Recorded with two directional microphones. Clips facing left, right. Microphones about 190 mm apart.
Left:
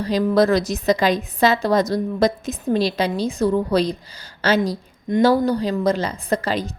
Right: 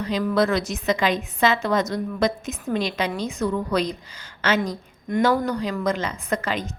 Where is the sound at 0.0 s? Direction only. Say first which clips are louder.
Left 4 dB; 35° left (ahead or behind).